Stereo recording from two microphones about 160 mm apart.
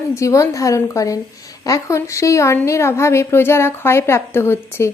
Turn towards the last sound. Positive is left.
turn(degrees=15)  # may be behind; listen again after turning